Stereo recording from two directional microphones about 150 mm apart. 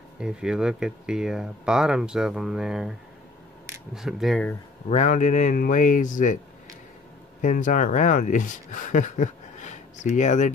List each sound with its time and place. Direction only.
0.2 s speech: 5° right (ahead or behind)
3.9 s speech: centre (ahead or behind)
4.8 s speech: 50° left (ahead or behind)
7.4 s speech: 60° left (ahead or behind)